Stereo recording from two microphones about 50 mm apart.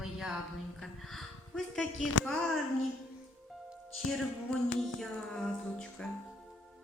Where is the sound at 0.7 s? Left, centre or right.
Centre.